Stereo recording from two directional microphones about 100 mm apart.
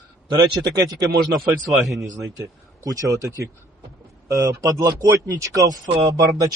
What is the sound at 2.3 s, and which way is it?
Speech, 35° right (ahead or behind).